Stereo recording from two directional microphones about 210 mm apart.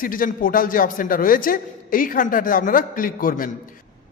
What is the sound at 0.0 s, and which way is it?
A man's voice, 40° left (ahead or behind).